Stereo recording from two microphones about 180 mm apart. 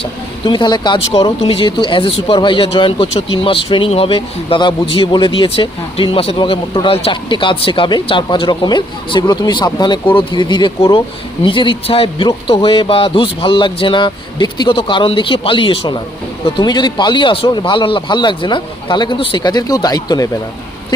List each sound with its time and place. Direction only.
0.0 s speech: 25° left (ahead or behind)